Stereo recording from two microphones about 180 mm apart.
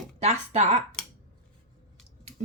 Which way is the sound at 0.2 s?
35° right (ahead or behind).